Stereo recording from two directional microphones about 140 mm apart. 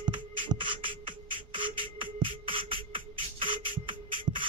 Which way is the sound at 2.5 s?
40° right (ahead or behind).